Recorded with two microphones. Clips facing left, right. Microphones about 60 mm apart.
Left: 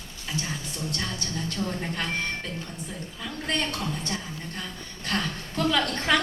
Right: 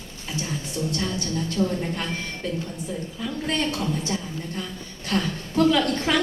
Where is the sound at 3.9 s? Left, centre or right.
Centre.